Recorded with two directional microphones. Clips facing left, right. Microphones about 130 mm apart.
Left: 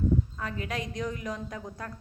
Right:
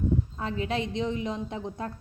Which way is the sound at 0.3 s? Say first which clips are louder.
Right 5 dB; 25° right (ahead or behind).